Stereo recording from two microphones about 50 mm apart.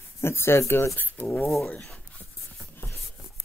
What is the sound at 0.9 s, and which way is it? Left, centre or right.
Speech, left.